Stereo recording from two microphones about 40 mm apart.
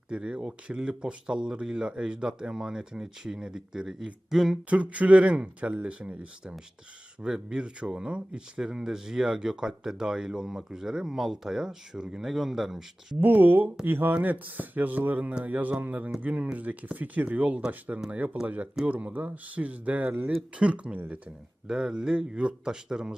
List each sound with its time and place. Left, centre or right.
0.1 s speech: right
4.7 s speech: right
7.2 s speech: right
13.1 s speech: right
14.2 s speech: right
21.7 s speech: centre